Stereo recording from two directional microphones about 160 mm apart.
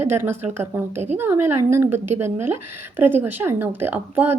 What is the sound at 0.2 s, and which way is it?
Speech, 15° right (ahead or behind).